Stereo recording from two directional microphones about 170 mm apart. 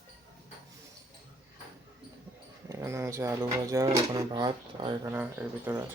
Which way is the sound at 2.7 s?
15° right (ahead or behind).